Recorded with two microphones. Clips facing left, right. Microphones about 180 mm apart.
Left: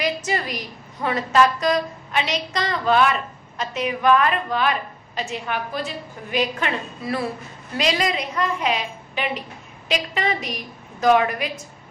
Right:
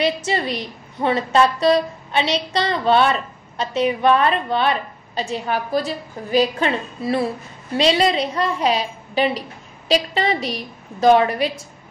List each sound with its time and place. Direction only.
0.0 s a woman's voice: 30° right (ahead or behind)